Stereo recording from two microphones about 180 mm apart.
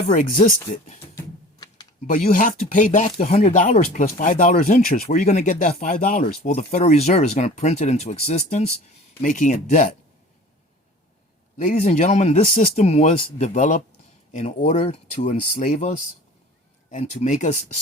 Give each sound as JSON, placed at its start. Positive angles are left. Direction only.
{"t": 1.1, "sound": "typing", "side_deg": 20}
{"t": 2.0, "sound": "speech", "side_deg": 50}
{"t": 11.5, "sound": "speech", "side_deg": 40}